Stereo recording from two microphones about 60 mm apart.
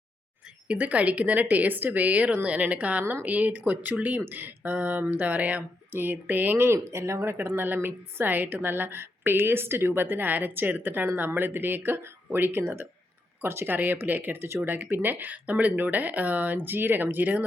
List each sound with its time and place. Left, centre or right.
0.4 s a woman's voice: right
6.9 s a woman's voice: right